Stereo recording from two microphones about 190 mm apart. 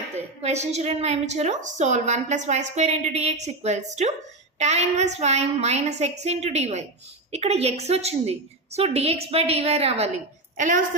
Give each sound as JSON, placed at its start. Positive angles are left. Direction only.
{"t": 0.2, "sound": "a woman's voice", "side_deg": -35}